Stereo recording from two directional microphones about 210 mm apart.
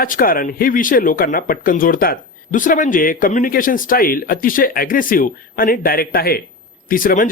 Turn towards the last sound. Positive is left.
turn(degrees=40)  # may be behind; listen again after turning